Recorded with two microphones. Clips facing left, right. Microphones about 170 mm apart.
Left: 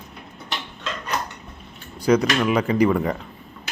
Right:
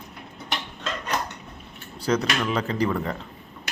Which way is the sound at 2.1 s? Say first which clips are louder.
Left 6 dB; 10° left (ahead or behind).